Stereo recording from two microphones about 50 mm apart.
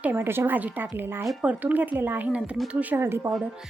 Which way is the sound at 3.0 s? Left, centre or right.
Right.